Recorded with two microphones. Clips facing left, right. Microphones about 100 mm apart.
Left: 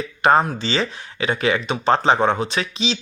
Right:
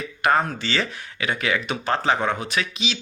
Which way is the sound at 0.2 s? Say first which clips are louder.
Left 4 dB; 30° left (ahead or behind).